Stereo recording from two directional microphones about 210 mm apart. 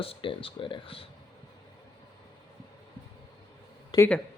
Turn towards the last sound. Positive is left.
turn(degrees=20)  # may be behind; listen again after turning